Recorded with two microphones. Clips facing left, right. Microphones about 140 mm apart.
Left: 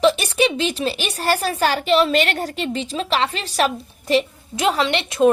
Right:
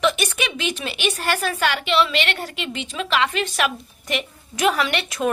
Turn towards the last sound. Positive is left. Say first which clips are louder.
# left 6 dB
turn(degrees=25)  # may be behind; listen again after turning